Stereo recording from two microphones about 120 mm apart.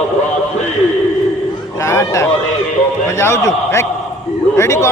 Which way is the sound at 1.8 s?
25° left (ahead or behind).